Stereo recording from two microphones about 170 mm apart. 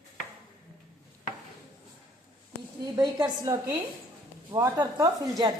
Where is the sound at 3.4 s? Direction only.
20° right (ahead or behind).